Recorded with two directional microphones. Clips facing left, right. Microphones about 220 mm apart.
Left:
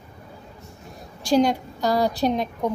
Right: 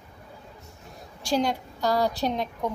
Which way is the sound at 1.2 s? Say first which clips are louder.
Left 6 dB; 15° left (ahead or behind).